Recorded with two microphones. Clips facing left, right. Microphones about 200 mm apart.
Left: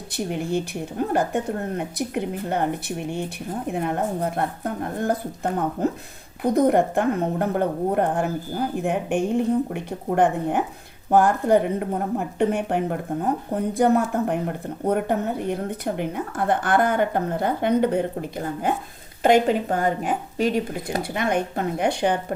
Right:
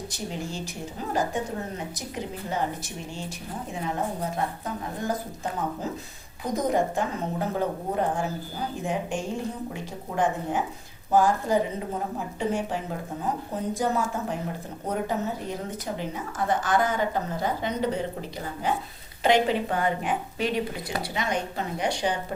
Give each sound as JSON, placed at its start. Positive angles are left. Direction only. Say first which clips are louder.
{"t": 0.1, "sound": "speech", "louder": "left 8 dB", "side_deg": 60}